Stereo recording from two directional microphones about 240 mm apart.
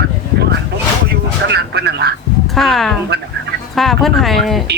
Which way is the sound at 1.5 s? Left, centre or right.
Right.